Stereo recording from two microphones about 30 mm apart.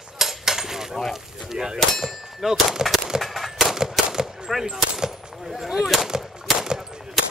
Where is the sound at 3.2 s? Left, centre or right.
Centre.